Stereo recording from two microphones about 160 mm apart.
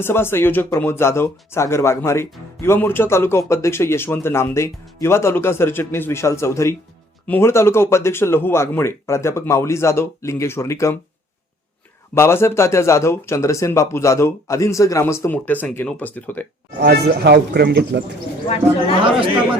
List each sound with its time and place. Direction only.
0.0 s a man's voice: 15° left (ahead or behind)
12.1 s a man's voice: 15° left (ahead or behind)
16.8 s speech: 90° right